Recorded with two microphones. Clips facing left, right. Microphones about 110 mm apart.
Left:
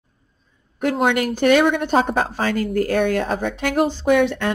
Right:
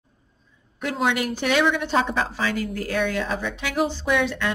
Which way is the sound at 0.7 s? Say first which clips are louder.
Left 5 dB; 50° left (ahead or behind).